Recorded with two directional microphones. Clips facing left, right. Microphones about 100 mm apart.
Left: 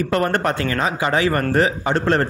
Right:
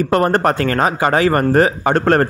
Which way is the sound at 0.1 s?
40° right (ahead or behind).